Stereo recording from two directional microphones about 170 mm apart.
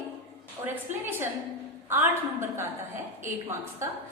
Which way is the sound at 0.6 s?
10° right (ahead or behind).